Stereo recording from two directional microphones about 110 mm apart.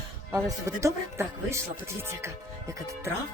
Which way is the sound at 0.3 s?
25° right (ahead or behind).